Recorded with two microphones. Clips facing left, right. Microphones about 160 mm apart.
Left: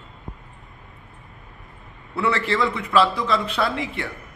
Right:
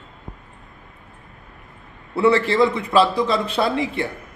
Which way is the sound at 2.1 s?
30° right (ahead or behind).